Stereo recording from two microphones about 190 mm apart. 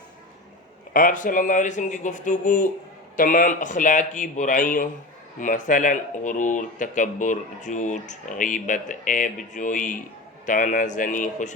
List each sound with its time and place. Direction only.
0.9 s speech: 45° left (ahead or behind)